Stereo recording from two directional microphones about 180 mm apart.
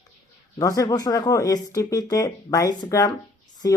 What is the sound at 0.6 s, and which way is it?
Speech, 20° left (ahead or behind).